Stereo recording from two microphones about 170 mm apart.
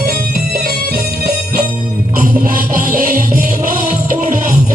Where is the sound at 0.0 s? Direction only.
60° right (ahead or behind).